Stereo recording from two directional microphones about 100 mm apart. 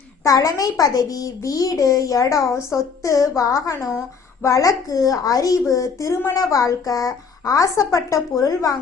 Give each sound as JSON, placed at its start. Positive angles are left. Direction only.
{"t": 0.3, "sound": "a woman's voice", "side_deg": 35}